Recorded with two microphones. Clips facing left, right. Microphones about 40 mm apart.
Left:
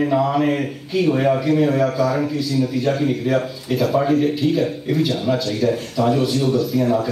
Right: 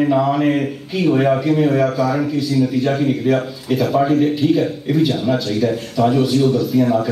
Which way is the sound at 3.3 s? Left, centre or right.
Centre.